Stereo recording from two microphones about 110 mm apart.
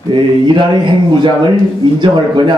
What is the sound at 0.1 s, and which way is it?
Speech, 45° right (ahead or behind).